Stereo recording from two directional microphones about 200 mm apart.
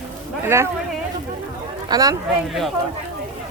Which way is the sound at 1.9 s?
15° right (ahead or behind).